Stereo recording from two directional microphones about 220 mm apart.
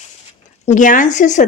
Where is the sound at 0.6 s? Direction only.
35° left (ahead or behind).